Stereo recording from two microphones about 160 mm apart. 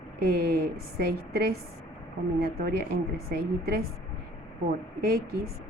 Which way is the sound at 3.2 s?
75° right (ahead or behind).